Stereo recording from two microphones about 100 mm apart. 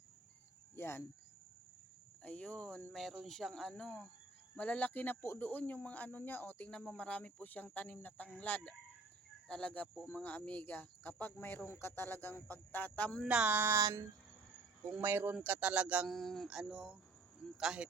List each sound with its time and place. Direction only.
0.8 s speech: 25° left (ahead or behind)
2.2 s speech: 10° left (ahead or behind)
13.2 s speech: 10° right (ahead or behind)
13.8 s a sound: 30° right (ahead or behind)
15.0 s speech: 20° right (ahead or behind)
16.0 s speech: centre (ahead or behind)